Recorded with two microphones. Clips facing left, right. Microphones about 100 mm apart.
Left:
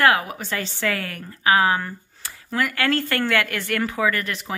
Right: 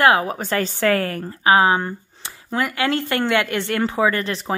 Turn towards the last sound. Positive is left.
turn(degrees=-30)  # may be behind; listen again after turning